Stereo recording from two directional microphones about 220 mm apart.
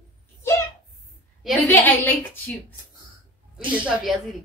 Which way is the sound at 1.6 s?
10° left (ahead or behind).